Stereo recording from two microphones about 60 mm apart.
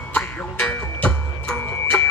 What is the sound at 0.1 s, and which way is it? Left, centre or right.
Music, left.